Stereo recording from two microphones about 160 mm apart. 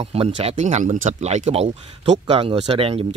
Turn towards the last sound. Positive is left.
turn(degrees=-35)  # may be behind; listen again after turning